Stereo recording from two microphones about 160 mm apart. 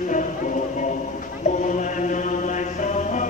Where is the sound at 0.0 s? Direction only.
50° left (ahead or behind).